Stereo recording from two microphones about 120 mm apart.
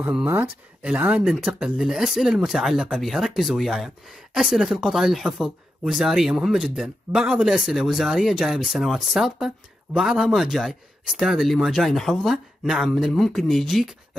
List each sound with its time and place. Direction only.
0.0 s speech: 15° right (ahead or behind)